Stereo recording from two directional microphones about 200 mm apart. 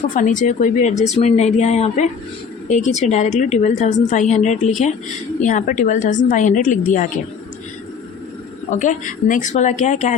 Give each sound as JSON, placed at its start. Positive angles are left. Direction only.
{"t": 0.2, "sound": "a woman's voice", "side_deg": 40}
{"t": 8.7, "sound": "a woman's voice", "side_deg": 40}